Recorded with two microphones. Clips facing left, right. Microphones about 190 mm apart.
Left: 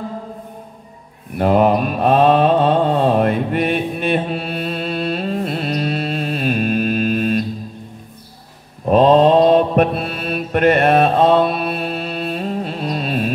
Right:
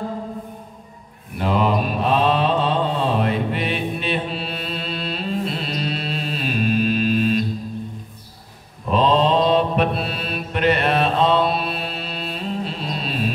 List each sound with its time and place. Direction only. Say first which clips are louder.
1.4 s mantra: left 6 dB; 50° left (ahead or behind)
8.8 s mantra: left 7 dB; 50° left (ahead or behind)